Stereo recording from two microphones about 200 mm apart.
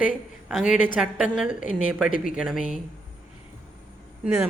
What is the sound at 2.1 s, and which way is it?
Speech, 40° left (ahead or behind).